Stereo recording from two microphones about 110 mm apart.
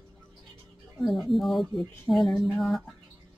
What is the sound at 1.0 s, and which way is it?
Speech, centre (ahead or behind).